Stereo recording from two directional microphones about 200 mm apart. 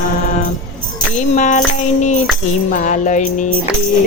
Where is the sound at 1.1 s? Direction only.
40° left (ahead or behind).